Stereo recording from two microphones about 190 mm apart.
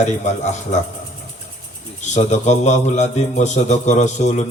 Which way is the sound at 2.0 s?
40° left (ahead or behind).